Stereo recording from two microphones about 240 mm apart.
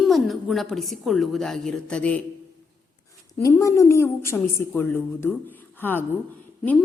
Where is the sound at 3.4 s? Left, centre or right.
Centre.